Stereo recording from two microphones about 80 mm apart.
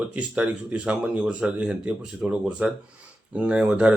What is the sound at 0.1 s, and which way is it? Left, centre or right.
Speech, centre.